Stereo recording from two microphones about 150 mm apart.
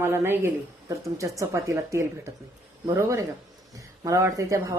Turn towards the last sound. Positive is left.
turn(degrees=-20)  # may be behind; listen again after turning